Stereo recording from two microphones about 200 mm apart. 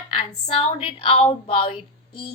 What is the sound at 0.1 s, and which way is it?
A woman's voice, 30° left (ahead or behind).